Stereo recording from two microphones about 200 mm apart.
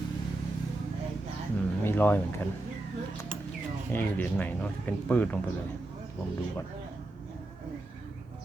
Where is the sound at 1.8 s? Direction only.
10° left (ahead or behind).